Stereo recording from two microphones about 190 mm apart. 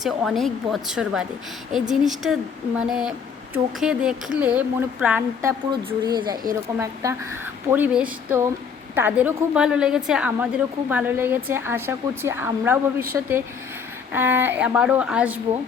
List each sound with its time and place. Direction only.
0.0 s a woman's voice: centre (ahead or behind)
6.1 s a woman's voice: 20° right (ahead or behind); by 15.4 s 5° right (ahead or behind)